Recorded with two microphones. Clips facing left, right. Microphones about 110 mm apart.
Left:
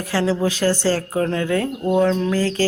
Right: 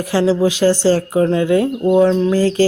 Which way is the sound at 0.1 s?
15° right (ahead or behind).